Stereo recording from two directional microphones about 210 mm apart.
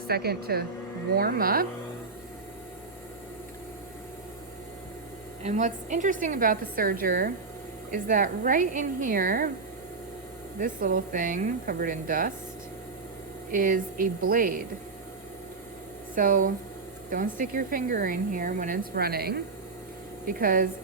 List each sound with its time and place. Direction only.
0.1 s speech: 50° right (ahead or behind)
5.4 s speech: 35° right (ahead or behind)
10.6 s speech: 40° right (ahead or behind)
13.5 s speech: 40° right (ahead or behind)
16.1 s speech: 40° right (ahead or behind)